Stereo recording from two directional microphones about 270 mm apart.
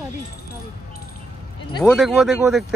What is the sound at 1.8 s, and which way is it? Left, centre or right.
Speech, centre.